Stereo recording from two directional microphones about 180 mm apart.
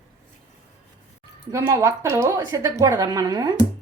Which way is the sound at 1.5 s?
15° right (ahead or behind).